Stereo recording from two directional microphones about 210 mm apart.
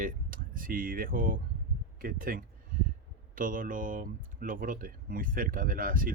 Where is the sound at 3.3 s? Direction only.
40° right (ahead or behind).